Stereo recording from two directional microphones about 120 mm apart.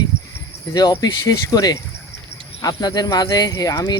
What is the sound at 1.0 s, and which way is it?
Speech, 30° left (ahead or behind).